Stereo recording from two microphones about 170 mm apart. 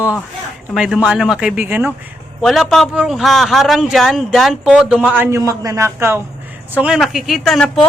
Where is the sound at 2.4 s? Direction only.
Centre (ahead or behind).